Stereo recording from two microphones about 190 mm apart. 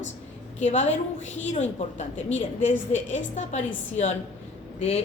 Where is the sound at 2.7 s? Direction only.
80° left.